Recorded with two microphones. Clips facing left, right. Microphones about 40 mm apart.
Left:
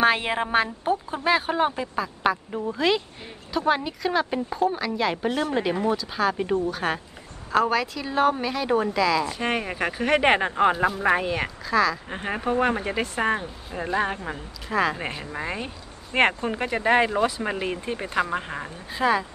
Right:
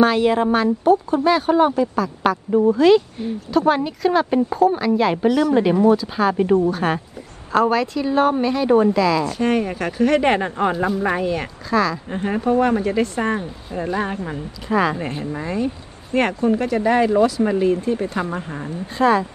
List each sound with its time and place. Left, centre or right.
0.0 s speech: left
2.2 s speech: centre
5.3 s speech: left
5.9 s speech: centre
9.3 s speech: centre
11.7 s speech: centre
12.1 s speech: centre
14.7 s speech: centre
15.3 s speech: left
18.9 s speech: centre